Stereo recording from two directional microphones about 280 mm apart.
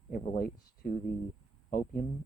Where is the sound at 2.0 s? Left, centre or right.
Left.